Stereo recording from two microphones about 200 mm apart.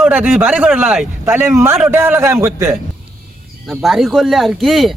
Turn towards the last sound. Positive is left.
turn(degrees=0)  # may be behind; listen again after turning